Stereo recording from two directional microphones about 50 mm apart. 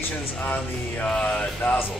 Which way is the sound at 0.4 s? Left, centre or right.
Left.